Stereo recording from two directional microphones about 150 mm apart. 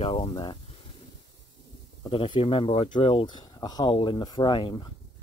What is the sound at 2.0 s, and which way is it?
Speech, 35° left (ahead or behind).